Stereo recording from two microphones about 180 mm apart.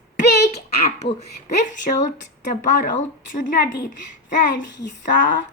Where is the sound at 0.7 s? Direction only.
40° left (ahead or behind).